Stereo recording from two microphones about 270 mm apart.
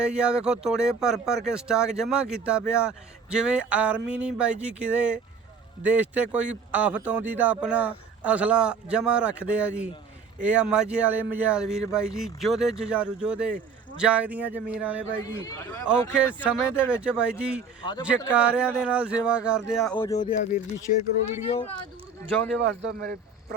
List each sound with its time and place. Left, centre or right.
0.0 s speech: centre
15.1 s a man's voice: centre
16.1 s speech: centre
20.0 s speech: centre
22.5 s speech: right